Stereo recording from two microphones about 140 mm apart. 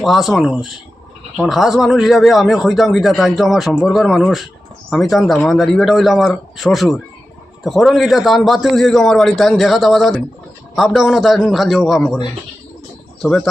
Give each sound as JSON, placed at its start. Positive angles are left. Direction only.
{"t": 0.0, "sound": "speech", "side_deg": 0}
{"t": 13.2, "sound": "speech", "side_deg": 0}